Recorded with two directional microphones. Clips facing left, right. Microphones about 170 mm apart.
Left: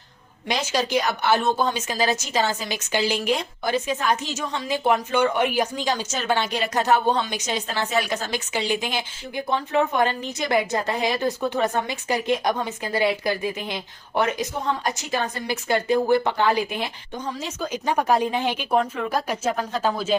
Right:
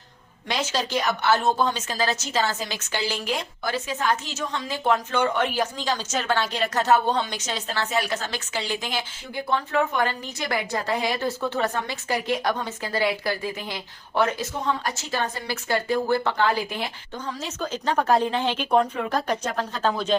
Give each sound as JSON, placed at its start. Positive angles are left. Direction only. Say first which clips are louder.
{"t": 0.4, "sound": "a woman's voice", "louder": "left 2 dB", "side_deg": 15}